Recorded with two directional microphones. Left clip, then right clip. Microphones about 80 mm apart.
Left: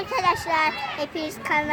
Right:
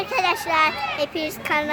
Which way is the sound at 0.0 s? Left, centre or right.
Centre.